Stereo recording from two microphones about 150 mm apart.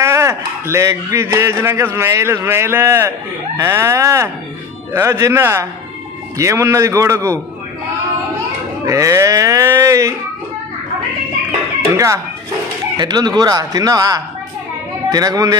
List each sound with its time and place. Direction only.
0.0 s speech: 20° right (ahead or behind)
8.8 s speech: 20° right (ahead or behind)
12.9 s speech: 30° right (ahead or behind)